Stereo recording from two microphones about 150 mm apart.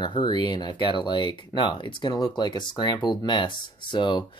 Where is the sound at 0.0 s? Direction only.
30° left (ahead or behind).